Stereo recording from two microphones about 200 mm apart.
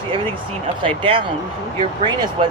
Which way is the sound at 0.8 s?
25° right (ahead or behind).